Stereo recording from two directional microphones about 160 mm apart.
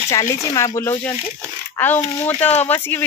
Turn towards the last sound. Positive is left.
turn(degrees=15)  # may be behind; listen again after turning